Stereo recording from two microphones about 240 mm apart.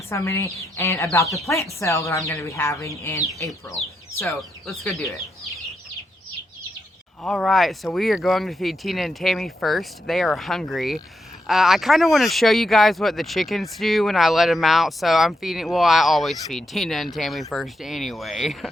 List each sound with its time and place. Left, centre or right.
0.1 s speech: centre
4.8 s speech: centre
7.2 s speech: centre